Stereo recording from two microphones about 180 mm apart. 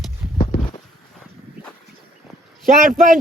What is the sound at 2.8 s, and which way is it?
Speech, 50° right (ahead or behind).